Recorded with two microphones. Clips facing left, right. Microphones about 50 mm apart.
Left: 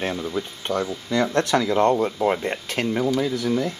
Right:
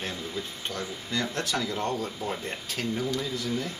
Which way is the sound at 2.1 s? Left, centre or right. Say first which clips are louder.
Left 11 dB; left.